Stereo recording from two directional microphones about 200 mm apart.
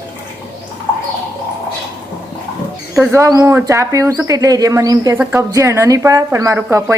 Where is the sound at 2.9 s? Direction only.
10° right (ahead or behind).